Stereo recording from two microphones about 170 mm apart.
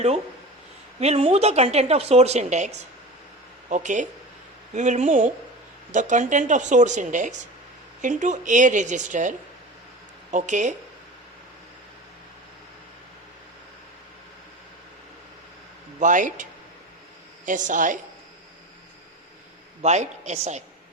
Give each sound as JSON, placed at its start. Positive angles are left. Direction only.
{"t": 0.9, "sound": "speech", "side_deg": -40}
{"t": 10.3, "sound": "speech", "side_deg": -45}
{"t": 16.0, "sound": "speech", "side_deg": -50}
{"t": 19.8, "sound": "speech", "side_deg": -40}